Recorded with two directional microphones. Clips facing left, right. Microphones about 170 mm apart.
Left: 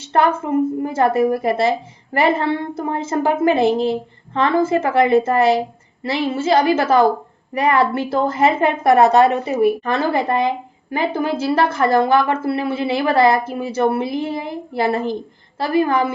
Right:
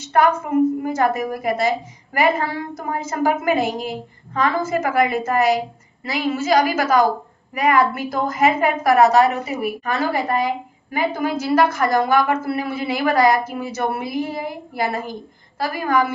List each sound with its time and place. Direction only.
0.0 s a woman's voice: 30° left (ahead or behind)